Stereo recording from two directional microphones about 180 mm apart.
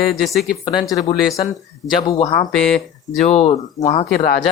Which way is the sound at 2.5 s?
5° left (ahead or behind).